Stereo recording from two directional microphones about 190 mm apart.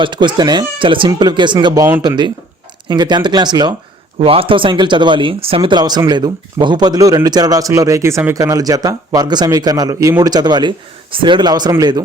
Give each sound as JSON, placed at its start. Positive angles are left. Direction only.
{"t": 0.0, "sound": "speech", "side_deg": -25}